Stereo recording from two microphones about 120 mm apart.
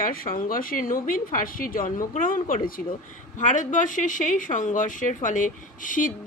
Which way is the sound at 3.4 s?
90° left.